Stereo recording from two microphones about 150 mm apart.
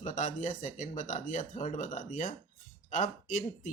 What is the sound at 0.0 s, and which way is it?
Speech, 55° left (ahead or behind).